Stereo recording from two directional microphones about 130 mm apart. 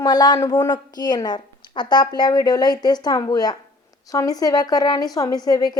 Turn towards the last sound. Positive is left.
turn(degrees=30)  # may be behind; listen again after turning